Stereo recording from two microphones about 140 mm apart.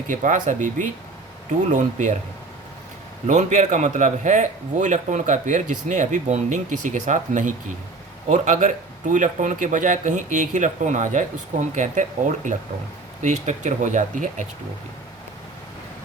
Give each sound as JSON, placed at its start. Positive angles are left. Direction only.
{"t": 0.1, "sound": "speech", "side_deg": -65}
{"t": 3.2, "sound": "speech", "side_deg": -60}